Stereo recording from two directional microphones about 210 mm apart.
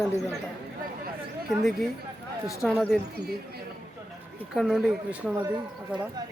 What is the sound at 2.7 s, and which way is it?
Speech, centre (ahead or behind).